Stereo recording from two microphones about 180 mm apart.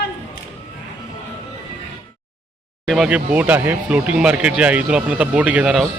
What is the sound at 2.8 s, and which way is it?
A man's voice, centre (ahead or behind).